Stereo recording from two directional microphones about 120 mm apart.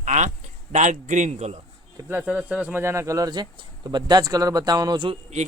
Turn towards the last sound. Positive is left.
turn(degrees=-40)  # may be behind; listen again after turning